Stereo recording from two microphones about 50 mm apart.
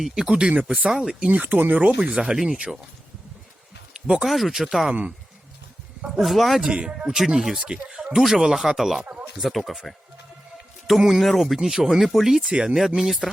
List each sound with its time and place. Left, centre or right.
0.0 s speech: centre
0.9 s speech: centre
1.3 s speech: right
1.8 s speech: right
2.1 s speech: centre
4.2 s speech: centre
4.9 s speech: right
6.1 s speech: centre
6.6 s speech: centre
12.5 s speech: centre
13.0 s speech: centre